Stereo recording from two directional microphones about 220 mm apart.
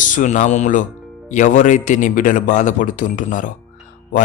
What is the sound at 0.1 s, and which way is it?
A man's voice, 35° left (ahead or behind).